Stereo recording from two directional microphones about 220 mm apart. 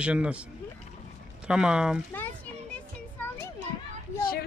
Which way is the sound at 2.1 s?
10° left (ahead or behind).